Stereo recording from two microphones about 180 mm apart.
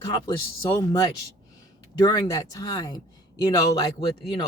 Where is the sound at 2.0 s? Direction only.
20° left (ahead or behind).